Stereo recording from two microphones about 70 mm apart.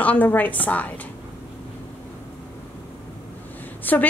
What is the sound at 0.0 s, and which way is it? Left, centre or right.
Speech, left.